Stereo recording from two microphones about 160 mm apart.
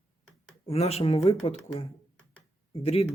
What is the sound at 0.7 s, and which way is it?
Speech, 40° left (ahead or behind).